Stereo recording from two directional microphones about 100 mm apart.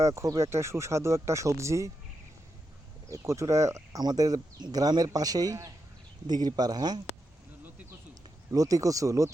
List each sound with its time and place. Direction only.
0.0 s speech: 30° right (ahead or behind)
3.1 s speech: 30° right (ahead or behind)
8.5 s speech: 35° right (ahead or behind)